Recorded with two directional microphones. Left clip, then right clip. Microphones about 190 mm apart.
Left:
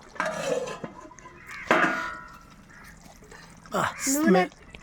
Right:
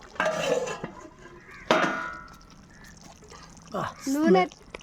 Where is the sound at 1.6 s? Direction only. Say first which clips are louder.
Left 1 dB; 45° right (ahead or behind).